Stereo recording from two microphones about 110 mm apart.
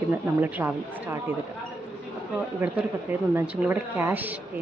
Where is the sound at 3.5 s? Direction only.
15° right (ahead or behind).